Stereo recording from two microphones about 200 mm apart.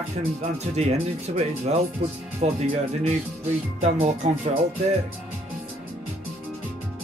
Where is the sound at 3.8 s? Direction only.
35° right (ahead or behind).